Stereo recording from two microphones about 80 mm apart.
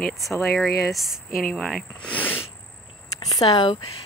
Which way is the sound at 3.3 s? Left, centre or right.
Left.